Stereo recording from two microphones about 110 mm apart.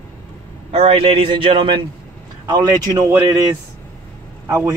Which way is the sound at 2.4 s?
35° right (ahead or behind).